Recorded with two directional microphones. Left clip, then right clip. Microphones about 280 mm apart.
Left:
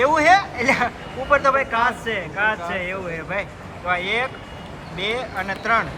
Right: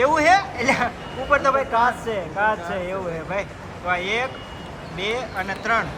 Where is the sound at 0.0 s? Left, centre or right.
Centre.